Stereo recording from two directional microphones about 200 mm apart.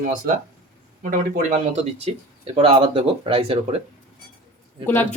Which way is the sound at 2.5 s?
25° right (ahead or behind).